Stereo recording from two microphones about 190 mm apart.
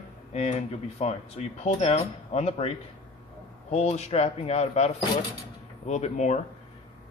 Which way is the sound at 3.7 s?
35° left (ahead or behind).